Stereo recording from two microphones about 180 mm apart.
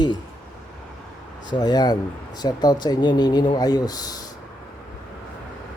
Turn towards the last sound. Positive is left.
turn(degrees=20)  # may be behind; listen again after turning